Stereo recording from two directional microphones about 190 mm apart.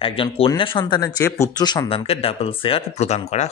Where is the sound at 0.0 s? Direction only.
30° left (ahead or behind).